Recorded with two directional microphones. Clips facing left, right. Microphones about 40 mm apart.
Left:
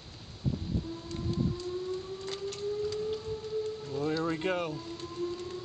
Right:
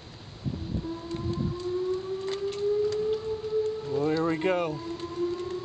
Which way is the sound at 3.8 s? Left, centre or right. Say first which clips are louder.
Right 5 dB; centre.